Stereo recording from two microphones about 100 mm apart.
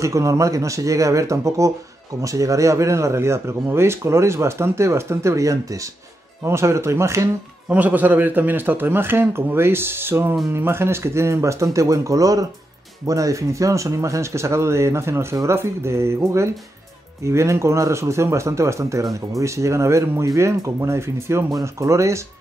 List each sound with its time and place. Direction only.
0.0 s speech: 30° right (ahead or behind)
7.7 s speech: 15° right (ahead or behind)